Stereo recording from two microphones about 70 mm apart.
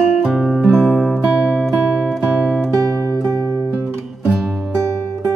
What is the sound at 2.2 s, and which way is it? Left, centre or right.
Music, centre.